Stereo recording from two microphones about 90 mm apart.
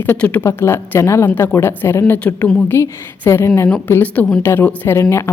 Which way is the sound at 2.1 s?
15° left (ahead or behind).